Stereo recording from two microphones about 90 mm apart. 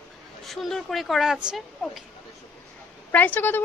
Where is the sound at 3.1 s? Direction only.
20° left (ahead or behind).